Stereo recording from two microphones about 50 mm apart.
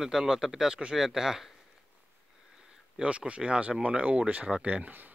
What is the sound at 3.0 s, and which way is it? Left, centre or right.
Speech, right.